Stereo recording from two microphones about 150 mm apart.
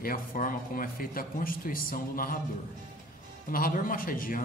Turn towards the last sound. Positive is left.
turn(degrees=70)  # may be behind; listen again after turning